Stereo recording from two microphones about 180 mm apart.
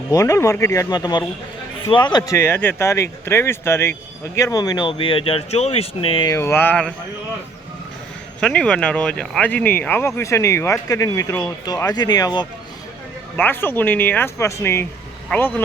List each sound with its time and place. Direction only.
0.1 s speech: 15° left (ahead or behind)
6.3 s speech: 15° left (ahead or behind)
8.4 s speech: 5° left (ahead or behind); by 12.5 s 25° left (ahead or behind)
13.3 s speech: 10° left (ahead or behind)